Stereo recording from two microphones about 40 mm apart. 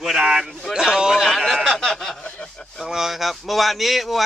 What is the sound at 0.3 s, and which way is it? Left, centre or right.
Speech, centre.